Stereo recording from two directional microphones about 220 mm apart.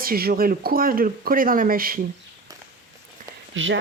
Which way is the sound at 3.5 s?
60° right (ahead or behind).